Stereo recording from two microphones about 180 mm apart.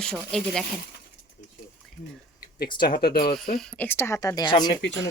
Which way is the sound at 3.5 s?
10° left (ahead or behind).